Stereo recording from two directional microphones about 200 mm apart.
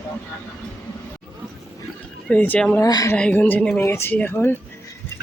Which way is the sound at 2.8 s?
15° left (ahead or behind).